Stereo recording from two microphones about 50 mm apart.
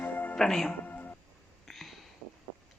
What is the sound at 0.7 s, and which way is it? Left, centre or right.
Music, left.